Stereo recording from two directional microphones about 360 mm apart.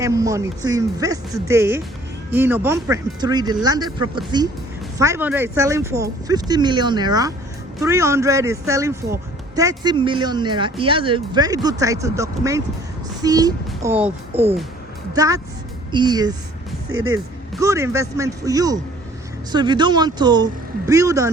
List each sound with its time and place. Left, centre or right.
0.0 s speech: centre
16.9 s speech: right
17.6 s speech: centre